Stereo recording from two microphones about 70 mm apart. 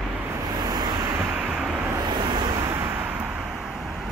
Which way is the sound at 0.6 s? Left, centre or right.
Right.